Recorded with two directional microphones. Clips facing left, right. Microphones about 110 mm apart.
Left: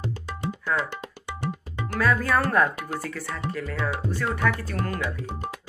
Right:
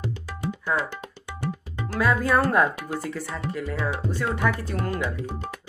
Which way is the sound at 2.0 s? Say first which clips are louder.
Right 1 dB; 20° right (ahead or behind).